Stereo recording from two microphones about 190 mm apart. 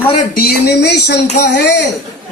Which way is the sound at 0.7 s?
60° left (ahead or behind).